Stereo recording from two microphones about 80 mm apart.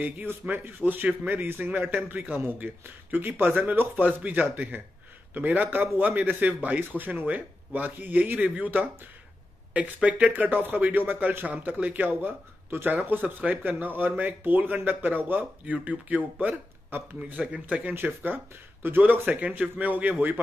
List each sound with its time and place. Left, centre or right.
0.0 s speech: right
10.0 s speech: centre
17.9 s speech: right